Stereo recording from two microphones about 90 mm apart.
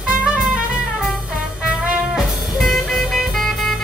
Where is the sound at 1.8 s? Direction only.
5° right (ahead or behind).